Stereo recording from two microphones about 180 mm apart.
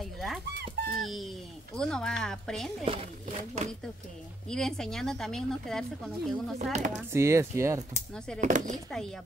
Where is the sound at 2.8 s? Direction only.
30° right (ahead or behind).